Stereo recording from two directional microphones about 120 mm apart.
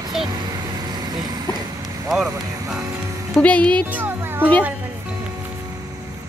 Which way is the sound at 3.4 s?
10° left (ahead or behind).